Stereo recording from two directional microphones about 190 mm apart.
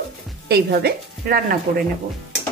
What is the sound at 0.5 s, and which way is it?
A woman's voice, 55° right (ahead or behind).